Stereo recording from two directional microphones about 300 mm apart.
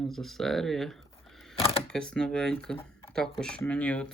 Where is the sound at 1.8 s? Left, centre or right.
Centre.